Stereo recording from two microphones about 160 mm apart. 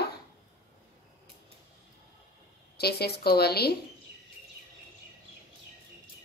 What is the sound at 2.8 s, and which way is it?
Speech, 80° left.